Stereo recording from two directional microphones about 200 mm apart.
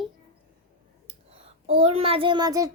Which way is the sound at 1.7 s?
30° right (ahead or behind).